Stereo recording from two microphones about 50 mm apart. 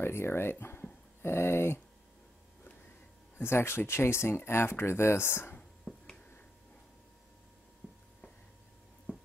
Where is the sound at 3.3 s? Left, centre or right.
Left.